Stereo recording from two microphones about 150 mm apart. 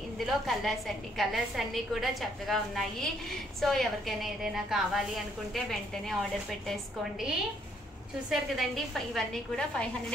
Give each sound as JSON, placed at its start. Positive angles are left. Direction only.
{"t": 0.2, "sound": "a woman's voice", "side_deg": 0}
{"t": 8.3, "sound": "a woman's voice", "side_deg": 0}